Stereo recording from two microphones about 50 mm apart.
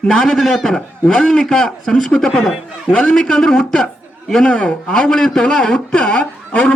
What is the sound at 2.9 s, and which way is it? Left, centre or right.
Speech, centre.